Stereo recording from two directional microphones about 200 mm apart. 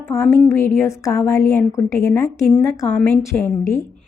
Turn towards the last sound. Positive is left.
turn(degrees=15)  # may be behind; listen again after turning